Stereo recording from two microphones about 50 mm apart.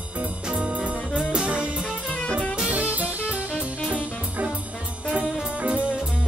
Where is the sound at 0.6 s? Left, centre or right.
Right.